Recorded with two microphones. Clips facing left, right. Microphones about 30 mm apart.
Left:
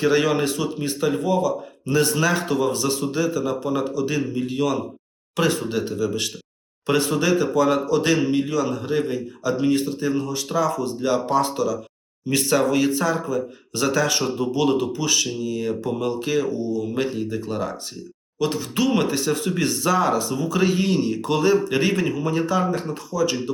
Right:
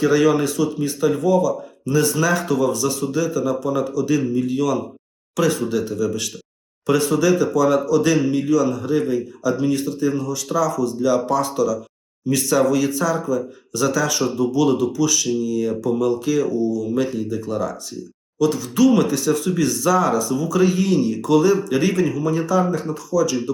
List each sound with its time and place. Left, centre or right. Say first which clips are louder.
0.0 s a man's voice: right 3 dB; left